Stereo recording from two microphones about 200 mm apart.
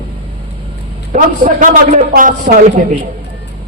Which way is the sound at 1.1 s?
40° right (ahead or behind).